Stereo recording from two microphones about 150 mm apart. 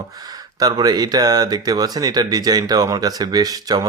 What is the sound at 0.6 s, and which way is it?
Speech, 25° right (ahead or behind).